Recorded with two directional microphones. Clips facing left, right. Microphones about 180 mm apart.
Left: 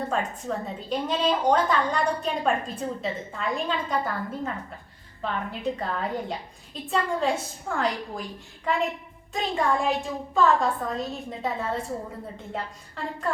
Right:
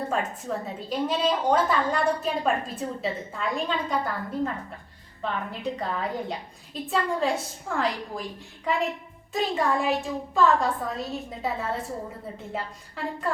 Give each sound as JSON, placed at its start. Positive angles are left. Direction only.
{"t": 0.1, "sound": "a woman's voice", "side_deg": -5}